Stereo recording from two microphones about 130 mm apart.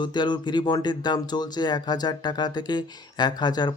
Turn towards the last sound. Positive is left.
turn(degrees=35)  # may be behind; listen again after turning